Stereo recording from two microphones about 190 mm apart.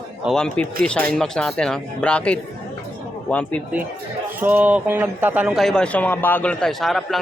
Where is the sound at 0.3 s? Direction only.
5° left (ahead or behind).